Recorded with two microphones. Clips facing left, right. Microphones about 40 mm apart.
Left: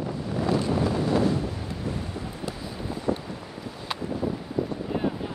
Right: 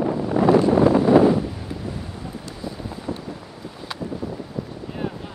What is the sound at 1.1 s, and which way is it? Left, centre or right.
Wind noise, right.